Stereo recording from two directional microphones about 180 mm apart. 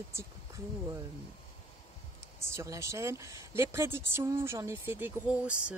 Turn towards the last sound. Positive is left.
turn(degrees=-5)  # may be behind; listen again after turning